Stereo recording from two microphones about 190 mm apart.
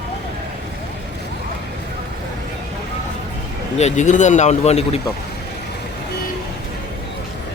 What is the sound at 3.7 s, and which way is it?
Speech, 35° left (ahead or behind).